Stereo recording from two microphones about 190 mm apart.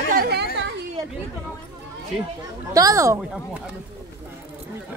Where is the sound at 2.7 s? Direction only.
15° right (ahead or behind).